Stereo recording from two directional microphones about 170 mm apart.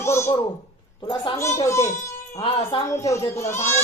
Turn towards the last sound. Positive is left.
turn(degrees=15)  # may be behind; listen again after turning